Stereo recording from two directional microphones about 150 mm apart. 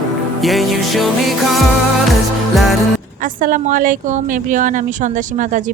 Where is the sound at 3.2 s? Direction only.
65° right (ahead or behind).